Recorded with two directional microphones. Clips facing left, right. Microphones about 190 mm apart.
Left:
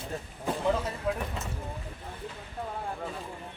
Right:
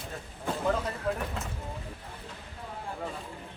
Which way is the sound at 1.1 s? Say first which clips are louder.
Left 1 dB; centre (ahead or behind).